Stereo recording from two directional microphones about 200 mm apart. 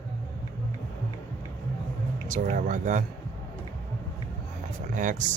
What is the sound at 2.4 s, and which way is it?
Speech, 45° right (ahead or behind).